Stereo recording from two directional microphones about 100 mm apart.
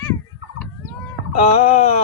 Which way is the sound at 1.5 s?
90° left.